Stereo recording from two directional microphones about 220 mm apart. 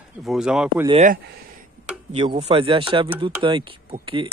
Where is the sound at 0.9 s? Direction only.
30° right (ahead or behind).